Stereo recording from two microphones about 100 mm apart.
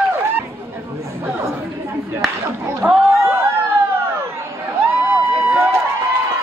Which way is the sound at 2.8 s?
25° right (ahead or behind).